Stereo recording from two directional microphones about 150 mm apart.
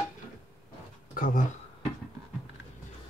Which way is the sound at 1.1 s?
65° left (ahead or behind).